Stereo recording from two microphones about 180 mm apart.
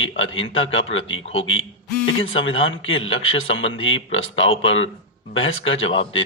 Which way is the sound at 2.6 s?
90° left.